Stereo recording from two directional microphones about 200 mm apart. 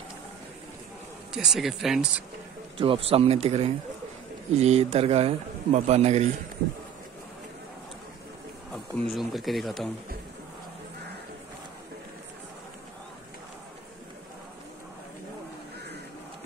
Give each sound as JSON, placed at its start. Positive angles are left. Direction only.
{"t": 1.3, "sound": "speech", "side_deg": -5}
{"t": 2.8, "sound": "a man's voice", "side_deg": -30}
{"t": 8.7, "sound": "speech", "side_deg": 0}